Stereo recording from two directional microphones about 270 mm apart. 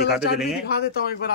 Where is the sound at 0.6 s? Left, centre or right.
Left.